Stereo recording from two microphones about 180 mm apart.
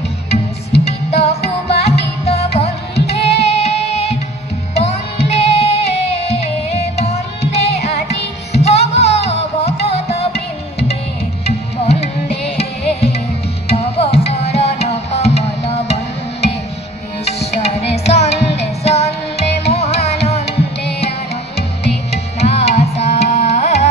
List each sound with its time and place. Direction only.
0.8 s music: 35° left (ahead or behind)
1.4 s music: 65° left (ahead or behind)
2.2 s music: 35° left (ahead or behind)
8.5 s music: 35° left (ahead or behind)
11.4 s music: 35° left (ahead or behind)
13.7 s music: 35° left (ahead or behind)
22.1 s music: 35° left (ahead or behind)